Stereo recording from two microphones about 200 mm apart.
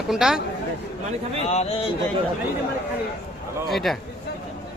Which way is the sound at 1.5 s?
30° left (ahead or behind).